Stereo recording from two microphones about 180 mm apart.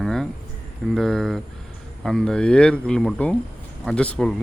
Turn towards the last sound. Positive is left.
turn(degrees=5)  # may be behind; listen again after turning